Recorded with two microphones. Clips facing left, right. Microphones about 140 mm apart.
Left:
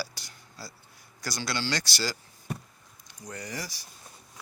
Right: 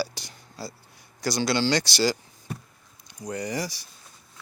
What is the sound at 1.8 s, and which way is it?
Speech, 85° right.